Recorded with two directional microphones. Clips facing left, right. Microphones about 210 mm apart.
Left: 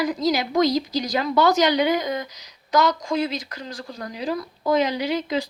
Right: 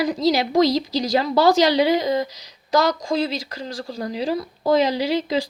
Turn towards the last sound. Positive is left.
turn(degrees=-30)  # may be behind; listen again after turning